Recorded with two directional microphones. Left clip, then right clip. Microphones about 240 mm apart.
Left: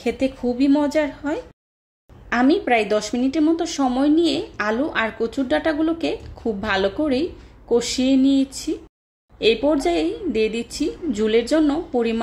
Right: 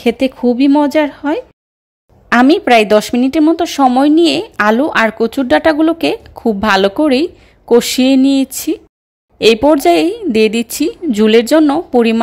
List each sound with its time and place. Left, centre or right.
0.0 s speech: right